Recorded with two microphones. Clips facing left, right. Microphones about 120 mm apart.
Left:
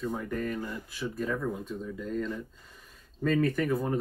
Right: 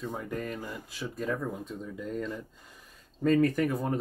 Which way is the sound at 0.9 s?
15° right (ahead or behind).